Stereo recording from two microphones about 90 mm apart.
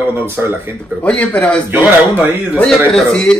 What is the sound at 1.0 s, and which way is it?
Speech, 15° left (ahead or behind).